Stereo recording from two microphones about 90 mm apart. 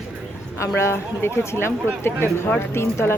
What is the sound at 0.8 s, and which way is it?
Speech, 30° left (ahead or behind).